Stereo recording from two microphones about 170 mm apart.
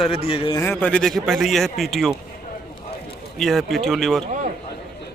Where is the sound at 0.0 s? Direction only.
35° left (ahead or behind).